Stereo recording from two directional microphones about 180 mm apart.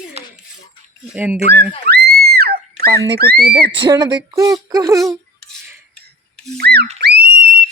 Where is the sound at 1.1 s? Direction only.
5° right (ahead or behind).